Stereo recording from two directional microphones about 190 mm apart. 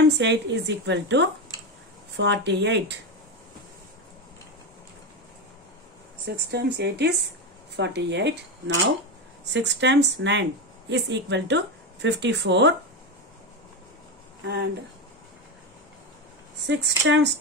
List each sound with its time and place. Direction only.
0.2 s speech: 65° right (ahead or behind)
6.2 s speech: 60° right (ahead or behind)
9.4 s speech: 65° right (ahead or behind)
14.4 s speech: 65° right (ahead or behind)
16.6 s speech: 65° right (ahead or behind)